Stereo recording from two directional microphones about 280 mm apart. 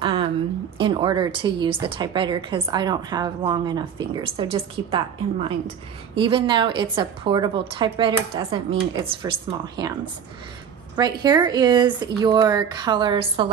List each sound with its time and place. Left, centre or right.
0.0 s a sound: centre
0.7 s a woman's voice: centre
11.0 s a woman's voice: centre